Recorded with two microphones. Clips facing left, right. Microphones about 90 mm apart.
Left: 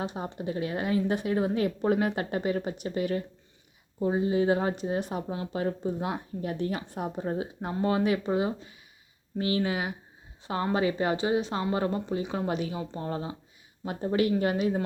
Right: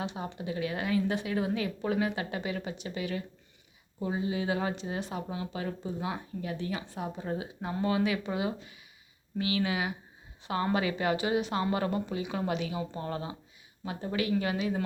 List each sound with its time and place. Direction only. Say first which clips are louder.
0.0 s speech: left 3 dB; 40° left (ahead or behind)
7.2 s speech: left 4 dB; 40° left (ahead or behind)
12.9 s speech: left 2 dB; 25° left (ahead or behind)
13.8 s speech: left 6 dB; 40° left (ahead or behind)